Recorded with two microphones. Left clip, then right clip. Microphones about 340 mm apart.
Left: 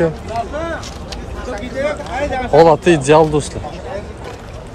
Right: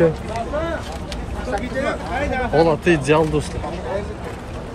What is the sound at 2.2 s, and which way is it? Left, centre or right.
Speech, left.